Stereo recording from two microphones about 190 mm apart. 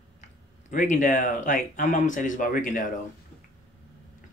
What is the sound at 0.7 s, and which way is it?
Speech, 40° left (ahead or behind).